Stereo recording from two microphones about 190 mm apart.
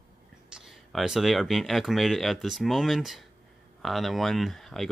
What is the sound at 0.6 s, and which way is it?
Speech, centre (ahead or behind).